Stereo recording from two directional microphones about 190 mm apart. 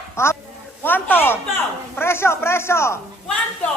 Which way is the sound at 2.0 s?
15° left (ahead or behind).